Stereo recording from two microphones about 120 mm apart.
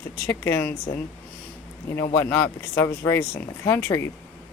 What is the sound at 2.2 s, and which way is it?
Speech, 20° left (ahead or behind).